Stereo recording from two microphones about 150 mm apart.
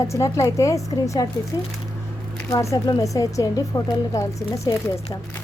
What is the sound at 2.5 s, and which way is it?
A woman's voice, 20° left (ahead or behind).